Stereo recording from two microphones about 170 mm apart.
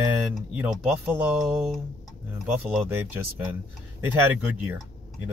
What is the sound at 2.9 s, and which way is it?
Speech, 10° right (ahead or behind).